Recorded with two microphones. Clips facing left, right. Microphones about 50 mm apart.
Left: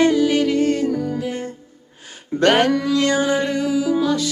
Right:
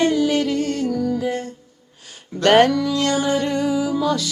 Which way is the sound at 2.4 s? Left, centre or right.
Left.